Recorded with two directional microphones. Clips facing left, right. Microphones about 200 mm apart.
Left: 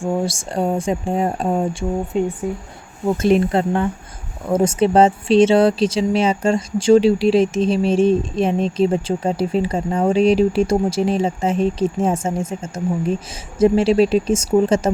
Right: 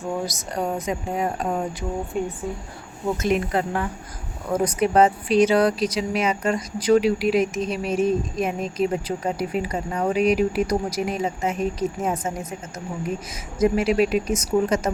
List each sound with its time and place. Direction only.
0.0 s speech: 30° left (ahead or behind)